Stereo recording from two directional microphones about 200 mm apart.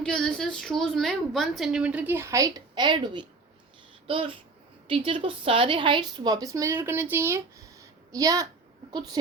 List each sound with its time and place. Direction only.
0.0 s a woman's voice: 5° left (ahead or behind); by 8.4 s 15° right (ahead or behind)